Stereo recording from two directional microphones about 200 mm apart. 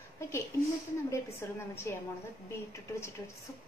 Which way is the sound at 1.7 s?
10° left (ahead or behind).